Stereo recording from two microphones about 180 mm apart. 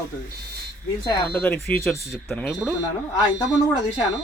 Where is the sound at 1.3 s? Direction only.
10° left (ahead or behind).